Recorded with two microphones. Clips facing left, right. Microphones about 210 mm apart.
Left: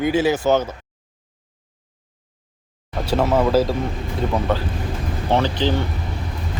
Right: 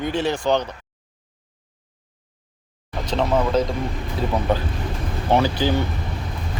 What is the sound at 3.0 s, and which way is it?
Speech, 5° left (ahead or behind).